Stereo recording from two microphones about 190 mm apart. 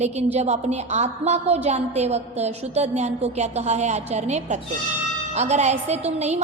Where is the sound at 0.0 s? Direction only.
35° right (ahead or behind).